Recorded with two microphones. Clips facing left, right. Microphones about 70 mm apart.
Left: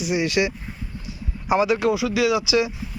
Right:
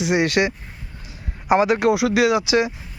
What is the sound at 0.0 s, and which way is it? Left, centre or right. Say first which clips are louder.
Speech: right 3 dB; right.